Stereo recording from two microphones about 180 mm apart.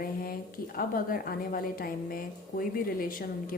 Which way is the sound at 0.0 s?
55° left (ahead or behind).